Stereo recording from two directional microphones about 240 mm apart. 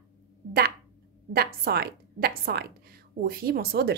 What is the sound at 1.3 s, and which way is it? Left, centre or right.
A woman's voice, right.